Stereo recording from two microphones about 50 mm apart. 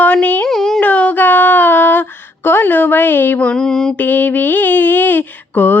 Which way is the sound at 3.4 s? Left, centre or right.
Centre.